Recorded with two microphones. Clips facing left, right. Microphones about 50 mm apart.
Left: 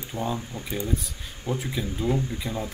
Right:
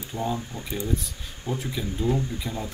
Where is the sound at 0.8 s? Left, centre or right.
Centre.